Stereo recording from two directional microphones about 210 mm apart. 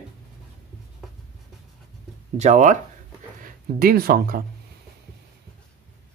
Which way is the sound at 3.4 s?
45° right (ahead or behind).